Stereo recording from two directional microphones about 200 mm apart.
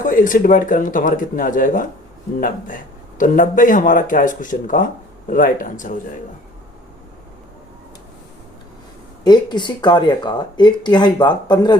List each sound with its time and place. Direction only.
0.0 s a man's voice: 45° left (ahead or behind)
9.2 s speech: 20° left (ahead or behind)